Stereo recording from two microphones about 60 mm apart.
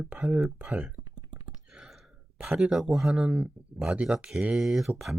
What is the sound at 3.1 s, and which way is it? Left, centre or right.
Speech, centre.